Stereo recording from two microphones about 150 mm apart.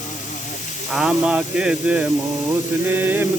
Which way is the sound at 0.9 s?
5° right (ahead or behind).